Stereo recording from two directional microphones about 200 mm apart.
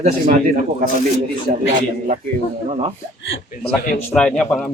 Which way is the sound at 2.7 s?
30° right (ahead or behind).